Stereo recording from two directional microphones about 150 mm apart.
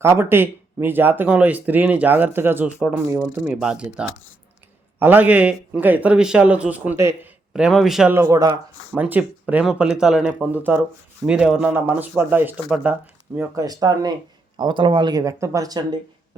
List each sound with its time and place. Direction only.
0.0 s speech: 15° right (ahead or behind)
7.5 s speech: centre (ahead or behind)
8.1 s speech: 20° right (ahead or behind)
9.0 s speech: 10° right (ahead or behind)
13.6 s speech: 25° right (ahead or behind)